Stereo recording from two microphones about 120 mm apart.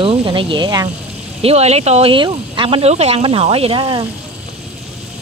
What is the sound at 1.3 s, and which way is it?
Speech, 60° right (ahead or behind).